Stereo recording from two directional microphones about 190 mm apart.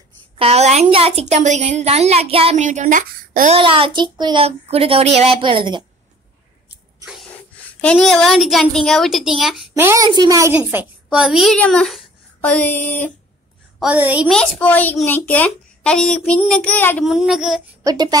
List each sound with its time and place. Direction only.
0.4 s a woman's voice: 35° right (ahead or behind)
3.5 s a child's voice: 30° right (ahead or behind)
7.8 s a woman's voice: 5° left (ahead or behind)
9.8 s a woman's voice: 20° right (ahead or behind); by 13.1 s 10° left (ahead or behind)
13.7 s a woman's voice: 10° right (ahead or behind)
14.3 s a child's voice: 5° left (ahead or behind)
17.0 s a woman's voice: centre (ahead or behind)
17.8 s a child's voice: 20° right (ahead or behind)